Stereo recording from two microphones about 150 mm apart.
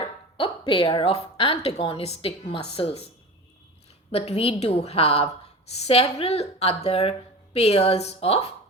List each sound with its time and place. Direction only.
0.0 s speech: 40° left (ahead or behind)
4.1 s a woman's voice: 40° left (ahead or behind)